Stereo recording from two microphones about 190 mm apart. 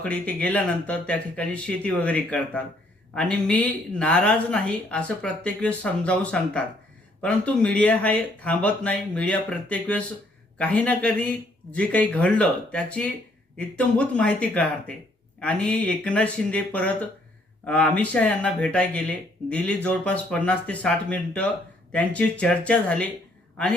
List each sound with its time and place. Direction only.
0.0 s a woman's voice: 5° left (ahead or behind)